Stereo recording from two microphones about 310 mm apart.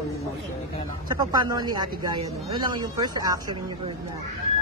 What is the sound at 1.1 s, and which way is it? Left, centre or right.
Speech, centre.